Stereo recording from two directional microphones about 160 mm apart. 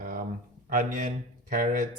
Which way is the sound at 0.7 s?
60° right (ahead or behind).